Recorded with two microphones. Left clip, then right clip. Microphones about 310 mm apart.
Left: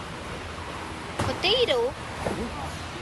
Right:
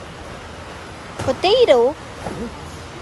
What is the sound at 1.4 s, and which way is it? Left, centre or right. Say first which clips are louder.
Speech: right 10 dB; centre.